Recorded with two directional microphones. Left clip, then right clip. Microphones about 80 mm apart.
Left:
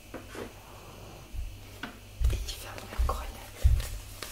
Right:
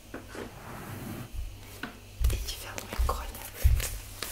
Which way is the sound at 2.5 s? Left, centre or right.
Right.